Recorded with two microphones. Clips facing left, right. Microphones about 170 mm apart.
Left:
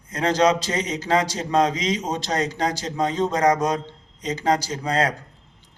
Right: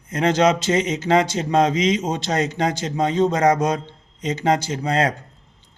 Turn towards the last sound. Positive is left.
turn(degrees=-25)  # may be behind; listen again after turning